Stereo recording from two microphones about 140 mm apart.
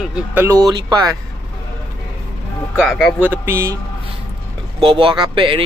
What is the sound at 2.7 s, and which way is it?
Speech, centre (ahead or behind).